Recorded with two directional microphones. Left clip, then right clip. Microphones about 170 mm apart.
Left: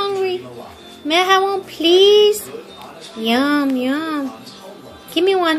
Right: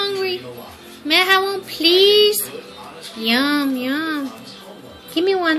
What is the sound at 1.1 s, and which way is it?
Speech, 40° left (ahead or behind).